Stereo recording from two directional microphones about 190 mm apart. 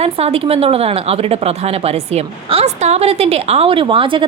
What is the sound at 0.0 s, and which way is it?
Speech, 30° right (ahead or behind).